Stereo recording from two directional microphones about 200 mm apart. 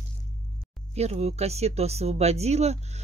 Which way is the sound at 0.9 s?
30° right (ahead or behind).